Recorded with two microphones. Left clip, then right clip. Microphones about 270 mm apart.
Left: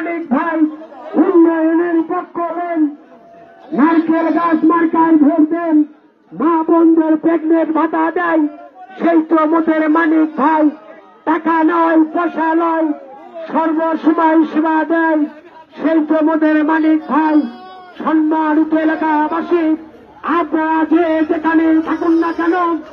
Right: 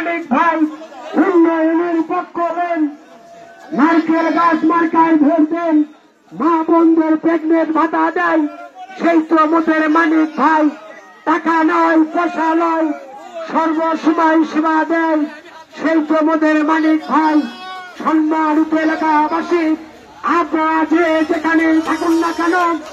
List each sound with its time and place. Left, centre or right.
1.1 s a sound: right
3.7 s a man's voice: right
16.3 s a man's voice: right
20.2 s speech: right